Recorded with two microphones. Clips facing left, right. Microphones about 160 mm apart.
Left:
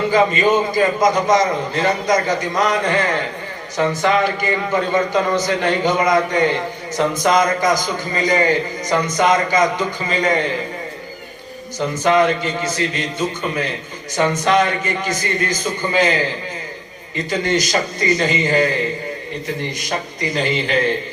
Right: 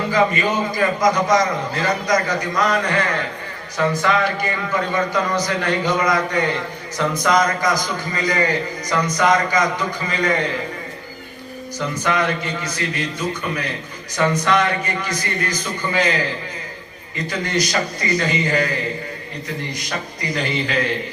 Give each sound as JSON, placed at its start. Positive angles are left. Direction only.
{"t": 0.1, "sound": "a man's voice", "side_deg": 25}
{"t": 11.8, "sound": "a man's voice", "side_deg": 25}
{"t": 17.2, "sound": "a man's voice", "side_deg": 25}
{"t": 19.8, "sound": "a man's voice", "side_deg": 25}